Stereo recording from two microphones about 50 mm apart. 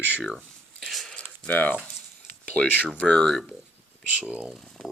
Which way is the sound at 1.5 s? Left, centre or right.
Left.